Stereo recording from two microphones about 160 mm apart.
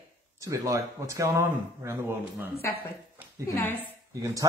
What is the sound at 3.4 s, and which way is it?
Speech, 15° left (ahead or behind).